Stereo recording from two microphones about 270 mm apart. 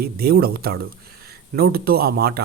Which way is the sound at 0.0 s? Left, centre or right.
Right.